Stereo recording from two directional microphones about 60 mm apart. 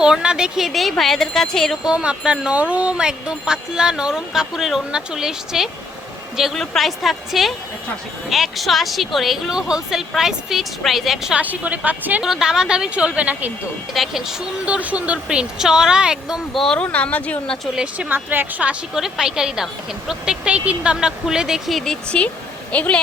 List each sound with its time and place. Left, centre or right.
0.0 s speech: centre
1.8 s speech: centre
11.3 s a woman's voice: right
12.2 s speech: centre
13.9 s speech: centre
14.6 s speech: right
16.5 s speech: centre
16.7 s speech: left
17.9 s a woman's voice: right
18.9 s speech: centre
22.1 s a woman's voice: centre